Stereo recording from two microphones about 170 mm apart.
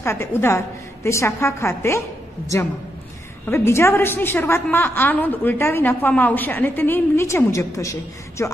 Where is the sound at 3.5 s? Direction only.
15° left (ahead or behind).